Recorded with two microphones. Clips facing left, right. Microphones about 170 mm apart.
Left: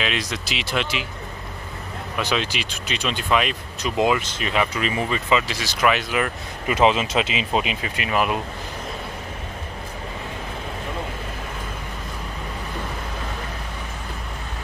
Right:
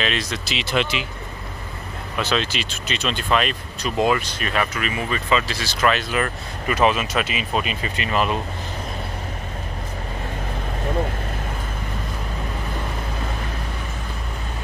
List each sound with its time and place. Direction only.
0.0 s speech: 10° left (ahead or behind)
2.1 s speech: 10° left (ahead or behind)
5.3 s speech: 15° left (ahead or behind)
7.8 s speech: 5° left (ahead or behind)